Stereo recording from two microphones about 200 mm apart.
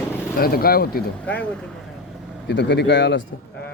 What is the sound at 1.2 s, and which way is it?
Speech, 5° left (ahead or behind).